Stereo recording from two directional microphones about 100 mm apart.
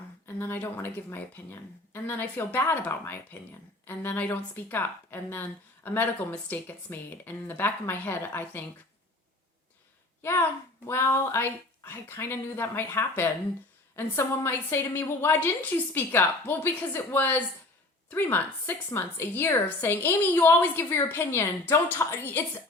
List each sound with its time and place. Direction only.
0.3 s speech: 20° left (ahead or behind)
10.2 s speech: 25° left (ahead or behind)